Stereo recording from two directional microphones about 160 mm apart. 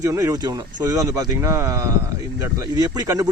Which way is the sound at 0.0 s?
20° right (ahead or behind).